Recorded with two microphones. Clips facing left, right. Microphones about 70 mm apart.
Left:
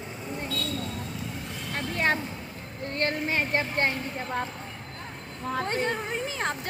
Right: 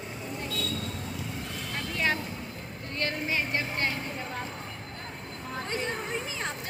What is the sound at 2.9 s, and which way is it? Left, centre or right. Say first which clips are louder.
Speech: left 3 dB; left.